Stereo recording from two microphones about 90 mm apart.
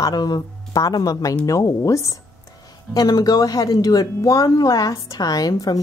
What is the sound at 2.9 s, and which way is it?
A woman's voice, 45° left (ahead or behind).